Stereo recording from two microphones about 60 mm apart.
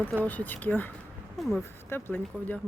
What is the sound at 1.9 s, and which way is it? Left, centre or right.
Speech, left.